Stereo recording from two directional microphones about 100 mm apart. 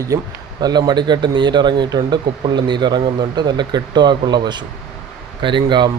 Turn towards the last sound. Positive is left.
turn(degrees=-50)  # may be behind; listen again after turning